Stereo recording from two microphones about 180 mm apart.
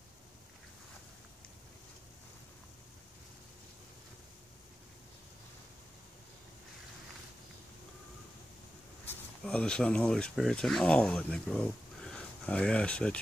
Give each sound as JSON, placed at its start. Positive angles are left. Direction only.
{"t": 9.0, "sound": "speech", "side_deg": 5}